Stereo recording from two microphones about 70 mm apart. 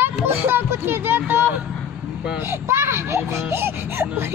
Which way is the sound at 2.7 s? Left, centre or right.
Right.